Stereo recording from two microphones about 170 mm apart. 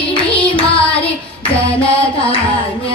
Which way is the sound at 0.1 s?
30° left (ahead or behind).